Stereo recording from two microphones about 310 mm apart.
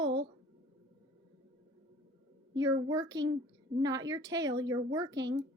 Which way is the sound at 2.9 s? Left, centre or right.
Centre.